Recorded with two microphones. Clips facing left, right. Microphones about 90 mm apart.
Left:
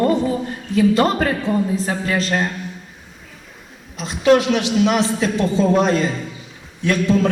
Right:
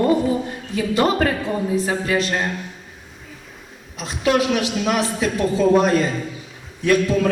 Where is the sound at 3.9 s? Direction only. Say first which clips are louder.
Left 5 dB; centre (ahead or behind).